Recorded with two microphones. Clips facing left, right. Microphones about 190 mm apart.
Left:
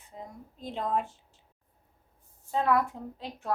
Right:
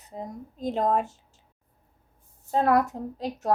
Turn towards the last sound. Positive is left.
turn(degrees=-40)  # may be behind; listen again after turning